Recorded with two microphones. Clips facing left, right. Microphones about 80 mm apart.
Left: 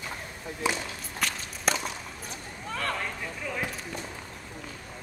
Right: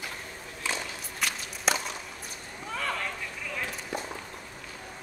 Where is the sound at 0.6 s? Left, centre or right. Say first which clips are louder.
Left 4 dB; centre.